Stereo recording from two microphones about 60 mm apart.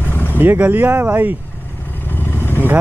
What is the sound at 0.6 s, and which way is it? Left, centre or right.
Speech, right.